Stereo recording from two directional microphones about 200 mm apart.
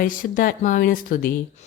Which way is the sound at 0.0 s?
45° left (ahead or behind).